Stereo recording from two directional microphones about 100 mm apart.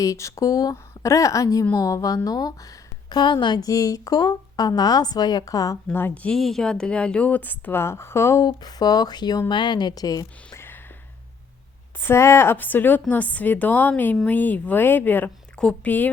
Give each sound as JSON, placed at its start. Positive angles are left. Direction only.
{"t": 0.0, "sound": "a woman's voice", "side_deg": 30}
{"t": 3.1, "sound": "a woman's voice", "side_deg": 50}
{"t": 5.9, "sound": "a woman's voice", "side_deg": 20}
{"t": 6.3, "sound": "a woman's voice", "side_deg": 5}
{"t": 8.4, "sound": "a woman's voice", "side_deg": 40}
{"t": 11.9, "sound": "a woman's voice", "side_deg": 25}